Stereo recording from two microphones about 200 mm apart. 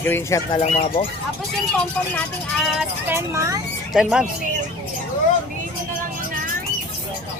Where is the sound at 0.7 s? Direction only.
35° left (ahead or behind).